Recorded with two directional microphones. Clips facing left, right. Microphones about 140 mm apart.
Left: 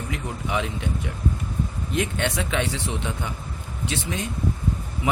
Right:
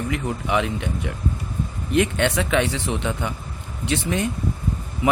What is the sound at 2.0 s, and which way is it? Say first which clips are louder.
A man's voice: right 6 dB; 65° right (ahead or behind).